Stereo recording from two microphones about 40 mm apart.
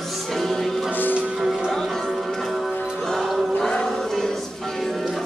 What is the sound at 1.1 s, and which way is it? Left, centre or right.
Music, right.